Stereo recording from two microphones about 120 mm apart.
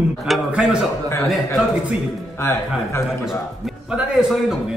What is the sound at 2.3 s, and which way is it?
Speech, 20° left (ahead or behind).